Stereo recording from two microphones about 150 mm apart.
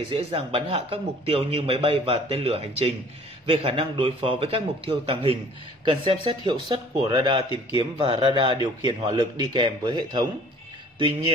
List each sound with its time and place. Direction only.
0.1 s speech: 40° right (ahead or behind)